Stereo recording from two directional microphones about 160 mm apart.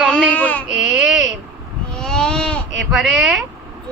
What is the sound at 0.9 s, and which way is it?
Speech, 5° right (ahead or behind).